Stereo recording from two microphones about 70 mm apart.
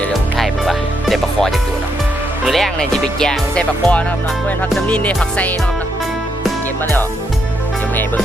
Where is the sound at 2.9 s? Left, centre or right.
Centre.